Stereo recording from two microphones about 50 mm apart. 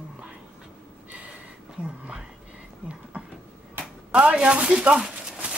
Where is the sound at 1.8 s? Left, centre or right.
Right.